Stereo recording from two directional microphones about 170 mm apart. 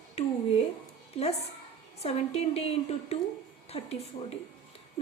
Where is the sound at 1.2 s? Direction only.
35° left (ahead or behind).